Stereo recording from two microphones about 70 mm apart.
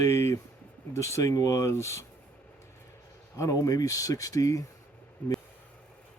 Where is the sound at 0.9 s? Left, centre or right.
Left.